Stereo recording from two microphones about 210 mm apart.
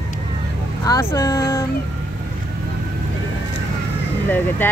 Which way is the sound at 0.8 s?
15° left (ahead or behind).